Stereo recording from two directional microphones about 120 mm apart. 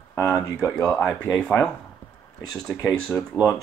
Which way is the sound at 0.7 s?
5° left (ahead or behind).